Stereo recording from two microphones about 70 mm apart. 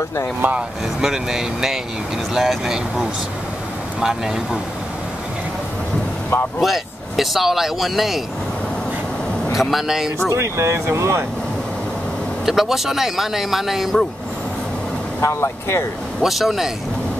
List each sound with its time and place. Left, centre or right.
0.4 s speech: right
1.0 s speech: centre
6.6 s speech: centre
9.6 s speech: centre
10.3 s speech: right
12.4 s speech: centre
15.1 s speech: left
16.2 s speech: centre